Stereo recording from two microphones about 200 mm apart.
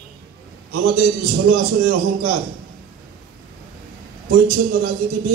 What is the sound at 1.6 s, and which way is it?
Speech, 50° right (ahead or behind).